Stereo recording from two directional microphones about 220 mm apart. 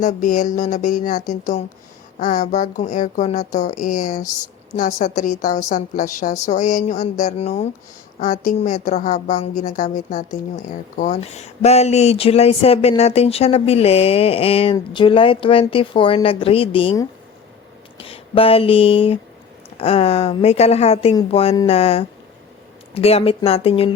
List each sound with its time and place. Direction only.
0.0 s a woman's voice: 35° left (ahead or behind)